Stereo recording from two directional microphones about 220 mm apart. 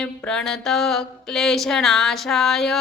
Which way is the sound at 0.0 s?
5° left (ahead or behind).